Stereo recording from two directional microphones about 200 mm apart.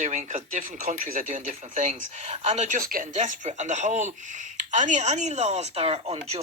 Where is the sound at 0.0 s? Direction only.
35° right (ahead or behind).